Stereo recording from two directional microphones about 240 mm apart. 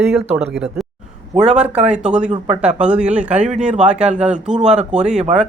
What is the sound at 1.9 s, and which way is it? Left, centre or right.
Speech, centre.